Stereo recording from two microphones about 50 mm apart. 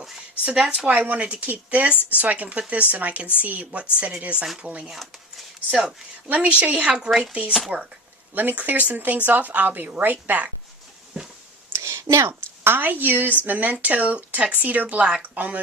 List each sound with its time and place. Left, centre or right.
0.5 s speech: centre
0.9 s speech: right
4.9 s a sound: centre
6.2 s speech: right
7.1 s speech: centre
7.7 s speech: right
11.1 s a sound: centre
11.7 s a sound: right
12.6 s speech: right